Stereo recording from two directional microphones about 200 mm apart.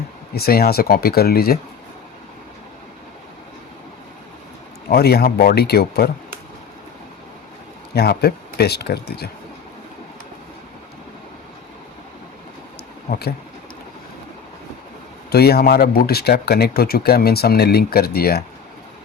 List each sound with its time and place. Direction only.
0.3 s speech: 50° left (ahead or behind)
4.9 s speech: 50° left (ahead or behind)
7.9 s speech: 55° left (ahead or behind)
13.1 s speech: 50° left (ahead or behind)
15.3 s speech: 50° left (ahead or behind)